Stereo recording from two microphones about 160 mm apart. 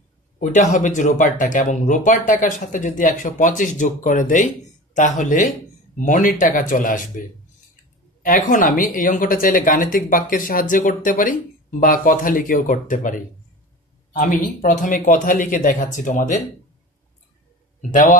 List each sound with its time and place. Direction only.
0.4 s speech: 50° left (ahead or behind)
14.2 s speech: 55° left (ahead or behind)